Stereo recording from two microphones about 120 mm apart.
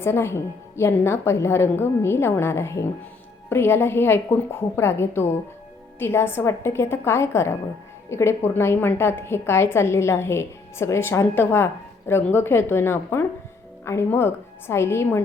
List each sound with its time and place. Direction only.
0.0 s a woman's voice: 20° left (ahead or behind)